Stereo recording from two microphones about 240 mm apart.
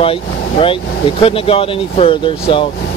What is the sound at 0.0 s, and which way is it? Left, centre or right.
Speech, left.